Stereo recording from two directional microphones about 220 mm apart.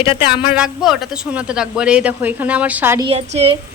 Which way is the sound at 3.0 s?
30° right (ahead or behind).